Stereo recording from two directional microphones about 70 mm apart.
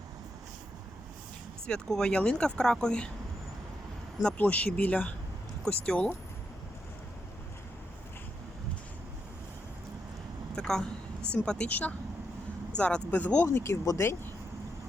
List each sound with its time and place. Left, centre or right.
1.6 s speech: centre
4.4 s speech: left
5.6 s speech: centre
10.5 s a sound: centre
11.3 s speech: centre; by 13.7 s left